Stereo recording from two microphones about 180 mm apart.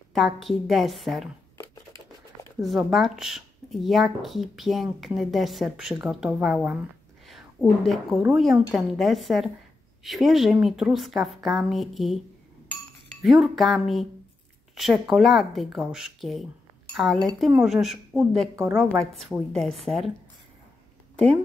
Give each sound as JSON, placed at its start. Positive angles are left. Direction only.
{"t": 0.1, "sound": "speech", "side_deg": 0}
{"t": 2.6, "sound": "speech", "side_deg": 0}
{"t": 13.2, "sound": "speech", "side_deg": 0}